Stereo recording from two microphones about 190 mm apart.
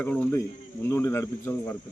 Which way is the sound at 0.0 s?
10° left (ahead or behind).